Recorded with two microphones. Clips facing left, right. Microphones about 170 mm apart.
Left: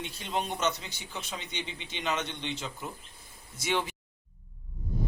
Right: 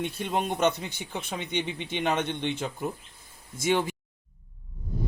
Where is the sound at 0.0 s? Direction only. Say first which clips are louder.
Right 5 dB; 55° right (ahead or behind).